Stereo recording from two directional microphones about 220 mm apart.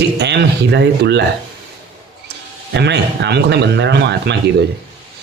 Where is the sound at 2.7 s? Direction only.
50° right (ahead or behind).